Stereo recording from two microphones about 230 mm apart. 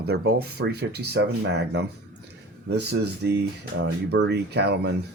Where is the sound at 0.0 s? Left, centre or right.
Right.